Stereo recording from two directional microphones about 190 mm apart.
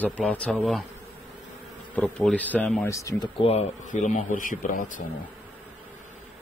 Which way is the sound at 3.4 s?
35° left (ahead or behind).